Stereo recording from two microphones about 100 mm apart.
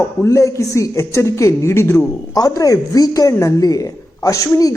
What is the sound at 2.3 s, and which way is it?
A woman's voice, 40° left (ahead or behind).